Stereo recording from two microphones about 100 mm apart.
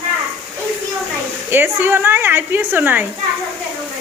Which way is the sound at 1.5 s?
20° right (ahead or behind).